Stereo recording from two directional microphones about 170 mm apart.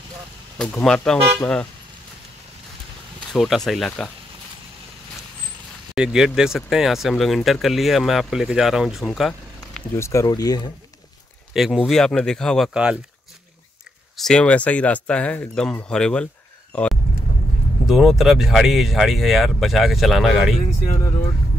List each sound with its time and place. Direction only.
0.6 s speech: 5° left (ahead or behind)
3.3 s speech: centre (ahead or behind)
5.9 s speech: 5° right (ahead or behind)
9.9 s speech: 15° left (ahead or behind)
11.5 s speech: 5° right (ahead or behind)
14.1 s speech: 5° left (ahead or behind)
16.7 s vehicle: 5° left (ahead or behind)
17.8 s speech: centre (ahead or behind)